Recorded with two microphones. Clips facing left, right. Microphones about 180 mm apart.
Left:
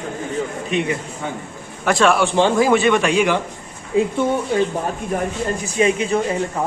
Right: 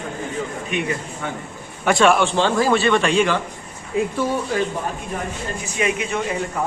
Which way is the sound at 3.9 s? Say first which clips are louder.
Left 3 dB; 25° left (ahead or behind).